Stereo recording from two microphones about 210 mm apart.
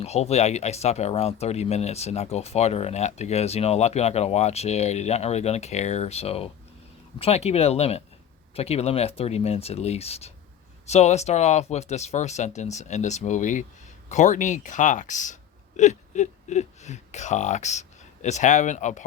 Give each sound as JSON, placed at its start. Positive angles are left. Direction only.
{"t": 0.0, "sound": "speech", "side_deg": 30}